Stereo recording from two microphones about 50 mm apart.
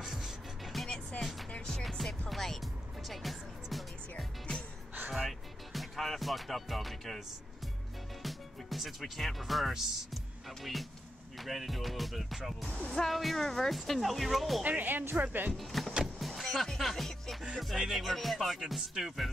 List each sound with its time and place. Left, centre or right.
0.0 s music: centre
0.8 s music: centre
1.7 s music: centre
8.2 s speech: centre
14.6 s speech: right
15.5 s speech: centre
16.2 s music: centre
17.6 s speech: centre